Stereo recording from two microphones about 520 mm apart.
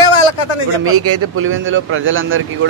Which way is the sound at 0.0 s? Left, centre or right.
Left.